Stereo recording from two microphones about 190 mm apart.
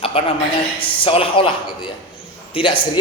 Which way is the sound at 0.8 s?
30° left (ahead or behind).